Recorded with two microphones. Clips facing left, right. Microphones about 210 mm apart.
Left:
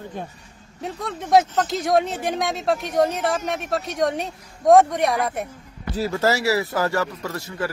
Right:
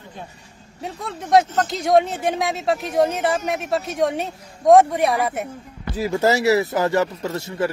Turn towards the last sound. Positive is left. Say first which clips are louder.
# right 4 dB
turn(degrees=-25)  # may be behind; listen again after turning